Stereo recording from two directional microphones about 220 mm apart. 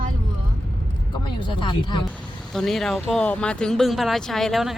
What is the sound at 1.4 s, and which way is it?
Speech, 20° left (ahead or behind).